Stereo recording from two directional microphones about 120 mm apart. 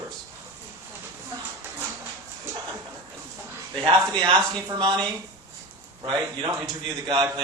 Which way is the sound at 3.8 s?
40° right (ahead or behind).